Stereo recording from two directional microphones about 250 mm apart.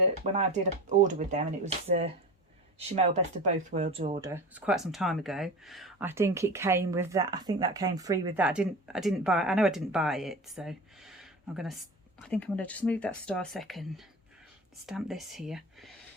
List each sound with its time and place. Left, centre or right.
0.3 s speech: right
4.3 s speech: centre
12.3 s speech: centre